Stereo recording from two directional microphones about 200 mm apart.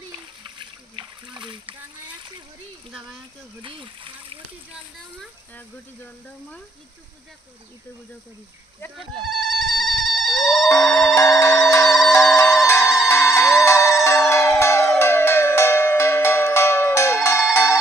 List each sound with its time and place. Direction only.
0.6 s splash: 25° right (ahead or behind)
3.6 s water: 25° right (ahead or behind)
9.2 s a sound: centre (ahead or behind)
11.1 s a sound: 15° left (ahead or behind)
12.6 s ringtone: 15° left (ahead or behind)
13.1 s siren: 15° left (ahead or behind)
13.7 s music: 15° left (ahead or behind)